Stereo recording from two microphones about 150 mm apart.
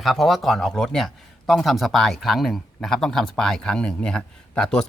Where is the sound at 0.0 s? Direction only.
Centre (ahead or behind).